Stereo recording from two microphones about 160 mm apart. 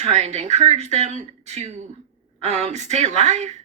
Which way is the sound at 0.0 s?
45° right (ahead or behind).